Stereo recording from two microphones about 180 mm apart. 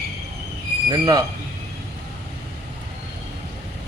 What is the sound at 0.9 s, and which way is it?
Speech, 20° right (ahead or behind).